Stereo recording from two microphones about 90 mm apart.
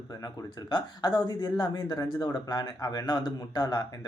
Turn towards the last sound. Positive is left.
turn(degrees=50)  # may be behind; listen again after turning